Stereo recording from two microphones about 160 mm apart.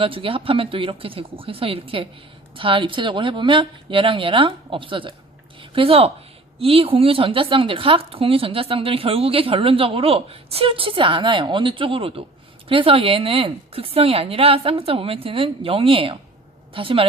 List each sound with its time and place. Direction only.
0.0 s a woman's voice: 35° right (ahead or behind)